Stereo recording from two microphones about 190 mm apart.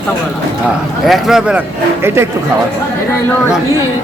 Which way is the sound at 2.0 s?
10° right (ahead or behind).